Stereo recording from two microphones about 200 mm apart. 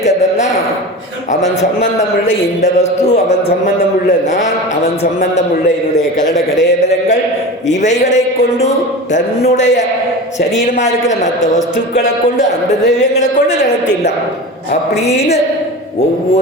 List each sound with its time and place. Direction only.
2.7 s a woman's voice: 35° left (ahead or behind)
6.0 s a woman's voice: 40° left (ahead or behind)
7.8 s a woman's voice: 35° left (ahead or behind)
9.6 s a woman's voice: 35° left (ahead or behind)
13.1 s a woman's voice: 35° left (ahead or behind)